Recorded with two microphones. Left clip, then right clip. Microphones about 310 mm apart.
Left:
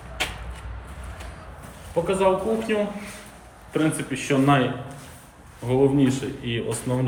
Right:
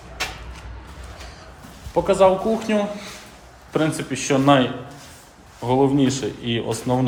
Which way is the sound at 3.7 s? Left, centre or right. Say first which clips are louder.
Right 2 dB; centre.